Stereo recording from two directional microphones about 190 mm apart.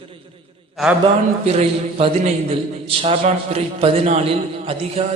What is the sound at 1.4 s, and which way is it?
A man's voice, 35° right (ahead or behind).